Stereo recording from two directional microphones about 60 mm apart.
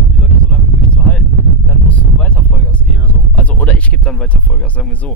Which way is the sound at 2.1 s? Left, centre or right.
Left.